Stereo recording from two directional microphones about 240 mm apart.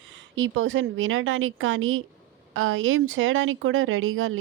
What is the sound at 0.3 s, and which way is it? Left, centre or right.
Speech, right.